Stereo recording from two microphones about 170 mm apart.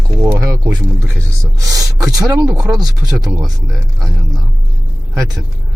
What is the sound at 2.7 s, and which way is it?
Speech, 20° right (ahead or behind).